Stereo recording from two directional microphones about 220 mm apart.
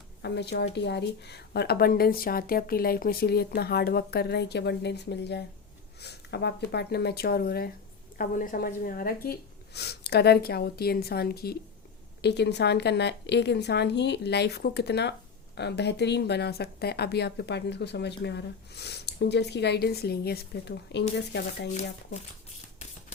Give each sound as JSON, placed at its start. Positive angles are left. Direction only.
{"t": 0.2, "sound": "speech", "side_deg": 50}